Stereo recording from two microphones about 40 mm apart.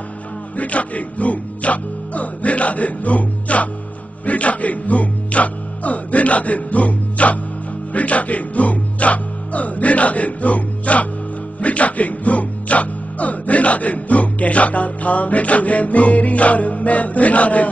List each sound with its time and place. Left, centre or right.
0.6 s speech: left